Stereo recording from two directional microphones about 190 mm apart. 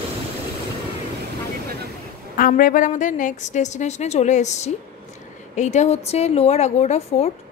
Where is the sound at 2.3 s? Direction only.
45° left (ahead or behind).